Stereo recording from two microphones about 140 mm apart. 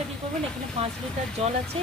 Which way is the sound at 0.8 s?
45° right (ahead or behind).